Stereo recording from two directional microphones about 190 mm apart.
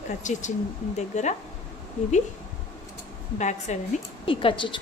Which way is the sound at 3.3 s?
40° left (ahead or behind).